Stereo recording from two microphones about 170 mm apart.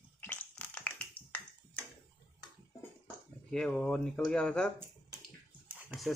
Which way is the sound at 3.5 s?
5° left (ahead or behind).